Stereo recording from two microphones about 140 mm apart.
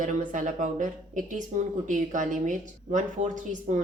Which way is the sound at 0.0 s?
70° right (ahead or behind).